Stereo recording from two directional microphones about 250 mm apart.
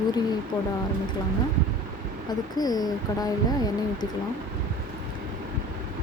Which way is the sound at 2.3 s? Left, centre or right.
Centre.